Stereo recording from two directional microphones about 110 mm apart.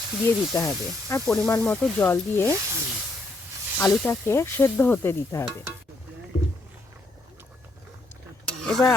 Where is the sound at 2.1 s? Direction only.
20° left (ahead or behind).